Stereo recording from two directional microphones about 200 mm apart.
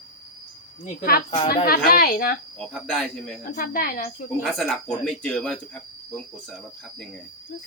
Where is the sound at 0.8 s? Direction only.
45° left (ahead or behind).